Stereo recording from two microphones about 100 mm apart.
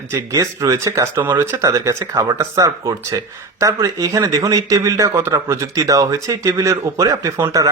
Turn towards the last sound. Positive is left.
turn(degrees=-30)  # may be behind; listen again after turning